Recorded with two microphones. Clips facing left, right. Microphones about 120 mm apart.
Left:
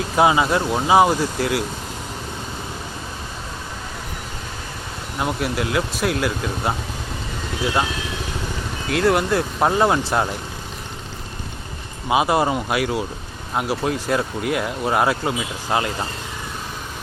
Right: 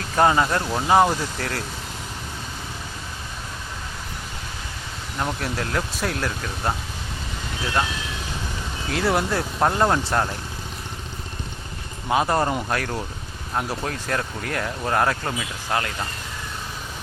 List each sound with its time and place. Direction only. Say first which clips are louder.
0.2 s speech: left 2 dB; 10° left (ahead or behind)
5.1 s speech: left 4 dB; 10° left (ahead or behind)
8.9 s speech: left 4 dB; centre (ahead or behind)
12.0 s speech: left 3 dB; 15° left (ahead or behind)